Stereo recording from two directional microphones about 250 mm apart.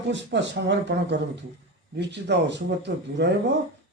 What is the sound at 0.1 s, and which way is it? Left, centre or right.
A man's voice, right.